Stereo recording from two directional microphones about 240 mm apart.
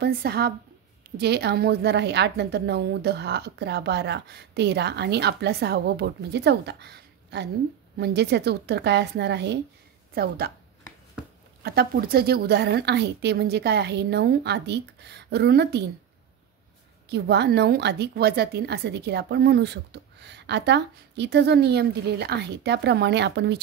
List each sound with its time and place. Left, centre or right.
0.0 s a woman's voice: right
11.6 s a woman's voice: right
17.1 s a woman's voice: right